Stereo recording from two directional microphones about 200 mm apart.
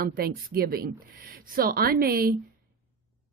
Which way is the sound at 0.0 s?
45° right (ahead or behind).